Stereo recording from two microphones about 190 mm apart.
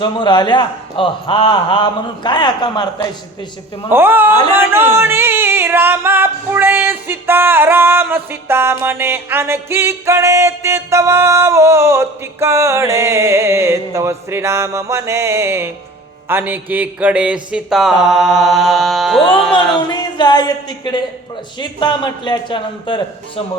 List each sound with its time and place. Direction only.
0.0 s a man's voice: 25° left (ahead or behind)
3.9 s music: 10° right (ahead or behind)
16.3 s a sound: 10° right (ahead or behind)
19.9 s a woman's voice: 25° left (ahead or behind)